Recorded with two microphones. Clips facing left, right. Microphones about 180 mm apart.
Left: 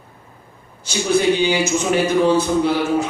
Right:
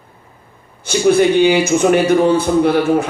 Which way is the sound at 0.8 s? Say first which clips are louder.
Right 5 dB; 55° right (ahead or behind).